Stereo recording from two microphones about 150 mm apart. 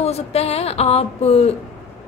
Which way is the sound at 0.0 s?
45° left (ahead or behind).